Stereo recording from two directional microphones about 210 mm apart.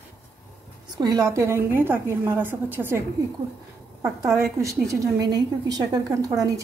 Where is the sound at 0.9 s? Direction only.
20° right (ahead or behind).